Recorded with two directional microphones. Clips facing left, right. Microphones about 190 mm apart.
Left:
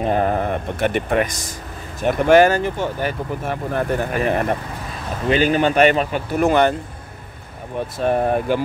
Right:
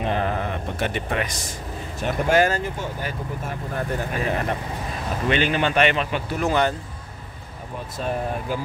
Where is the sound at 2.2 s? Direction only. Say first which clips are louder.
Left 7 dB; 70° left (ahead or behind).